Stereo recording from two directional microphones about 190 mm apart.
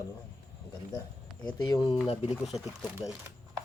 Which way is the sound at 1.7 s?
20° left (ahead or behind).